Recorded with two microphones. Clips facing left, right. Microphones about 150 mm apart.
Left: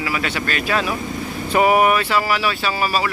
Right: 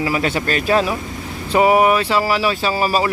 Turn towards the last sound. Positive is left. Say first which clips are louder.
# right 3 dB
turn(degrees=-35)  # may be behind; listen again after turning